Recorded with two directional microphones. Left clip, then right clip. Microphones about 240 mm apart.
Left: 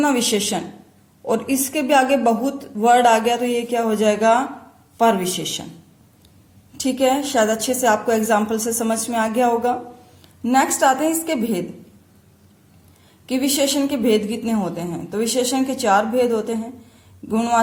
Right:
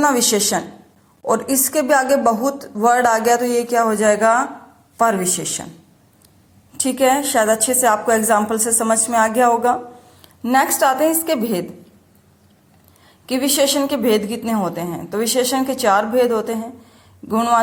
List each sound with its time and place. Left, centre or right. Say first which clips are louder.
0.0 s a woman's voice: right 3 dB; centre
5.5 s a woman's voice: even; centre
6.7 s a woman's voice: right 3 dB; centre
13.2 s a woman's voice: right 3 dB; centre